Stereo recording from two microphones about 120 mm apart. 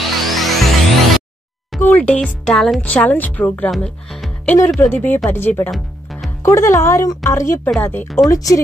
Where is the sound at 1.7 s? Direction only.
5° left (ahead or behind).